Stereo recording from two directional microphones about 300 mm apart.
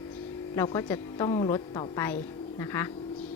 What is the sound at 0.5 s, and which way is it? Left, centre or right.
A woman's voice, centre.